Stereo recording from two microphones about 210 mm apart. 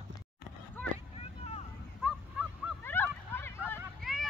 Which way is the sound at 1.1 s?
30° left (ahead or behind).